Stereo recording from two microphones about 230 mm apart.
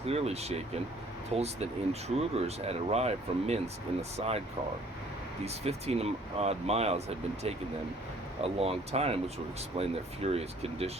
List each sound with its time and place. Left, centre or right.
0.0 s speech: right
5.5 s speech: right